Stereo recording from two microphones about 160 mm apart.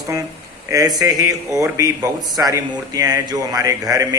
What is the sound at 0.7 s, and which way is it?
Speech, 20° right (ahead or behind).